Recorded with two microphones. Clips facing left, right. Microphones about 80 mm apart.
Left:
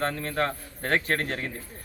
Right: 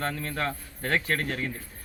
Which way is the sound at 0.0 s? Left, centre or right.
Left.